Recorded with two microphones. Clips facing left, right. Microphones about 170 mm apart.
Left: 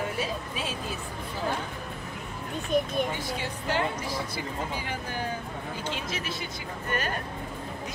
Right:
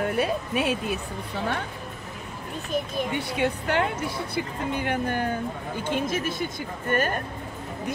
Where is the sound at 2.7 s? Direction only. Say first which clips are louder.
Left 2 dB; centre (ahead or behind).